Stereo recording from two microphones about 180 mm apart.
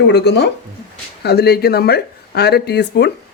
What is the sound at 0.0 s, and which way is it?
Speech, 70° left (ahead or behind).